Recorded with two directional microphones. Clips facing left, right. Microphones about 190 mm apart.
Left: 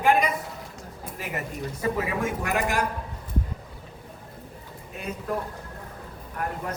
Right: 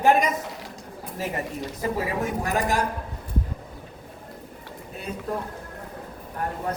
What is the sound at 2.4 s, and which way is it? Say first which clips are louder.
Speech: right 4 dB; 35° right (ahead or behind).